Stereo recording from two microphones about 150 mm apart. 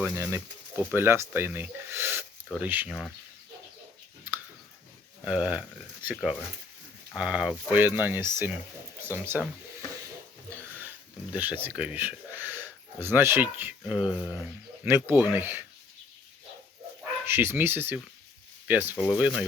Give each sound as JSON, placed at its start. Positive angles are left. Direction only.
{"t": 0.0, "sound": "speech", "side_deg": -15}
{"t": 5.2, "sound": "speech", "side_deg": -10}
{"t": 10.5, "sound": "speech", "side_deg": -10}
{"t": 17.2, "sound": "speech", "side_deg": -15}